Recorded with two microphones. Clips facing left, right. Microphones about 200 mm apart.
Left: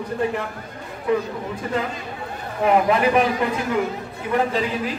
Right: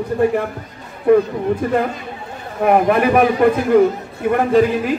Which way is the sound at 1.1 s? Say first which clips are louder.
Right 9 dB; 55° right (ahead or behind).